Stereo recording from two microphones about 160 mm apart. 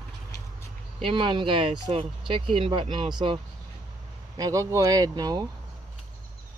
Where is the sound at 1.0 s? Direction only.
30° right (ahead or behind).